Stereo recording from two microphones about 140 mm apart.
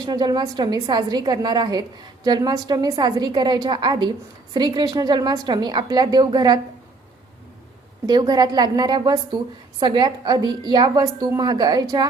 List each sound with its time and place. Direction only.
0.0 s a woman's voice: 30° right (ahead or behind)
8.0 s a woman's voice: 30° right (ahead or behind)